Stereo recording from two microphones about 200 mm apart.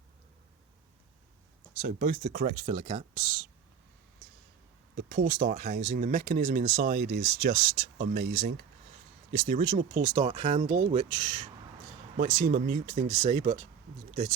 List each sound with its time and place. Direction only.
1.8 s speech: 45° right (ahead or behind)
4.9 s speech: 45° right (ahead or behind)
13.2 s speech: 35° right (ahead or behind)